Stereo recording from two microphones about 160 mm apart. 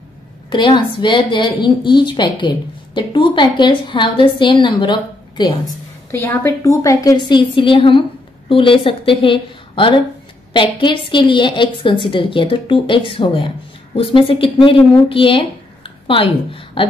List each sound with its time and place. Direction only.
0.5 s a woman's voice: 30° left (ahead or behind)
6.1 s a woman's voice: 15° left (ahead or behind); by 16.8 s 35° left (ahead or behind)